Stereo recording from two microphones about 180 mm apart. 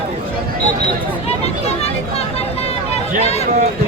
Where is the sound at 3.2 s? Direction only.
35° left (ahead or behind).